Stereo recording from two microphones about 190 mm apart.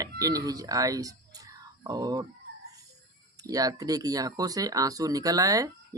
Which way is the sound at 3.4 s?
20° right (ahead or behind).